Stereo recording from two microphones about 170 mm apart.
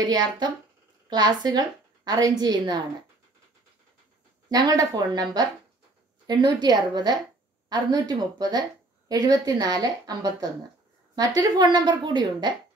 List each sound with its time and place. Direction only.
0.0 s a woman's voice: 25° right (ahead or behind)
4.5 s a woman's voice: 20° right (ahead or behind)